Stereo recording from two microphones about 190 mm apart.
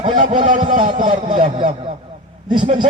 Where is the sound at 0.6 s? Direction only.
30° right (ahead or behind).